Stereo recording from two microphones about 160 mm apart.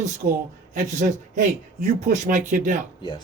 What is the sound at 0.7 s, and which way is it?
Speech, 55° right (ahead or behind).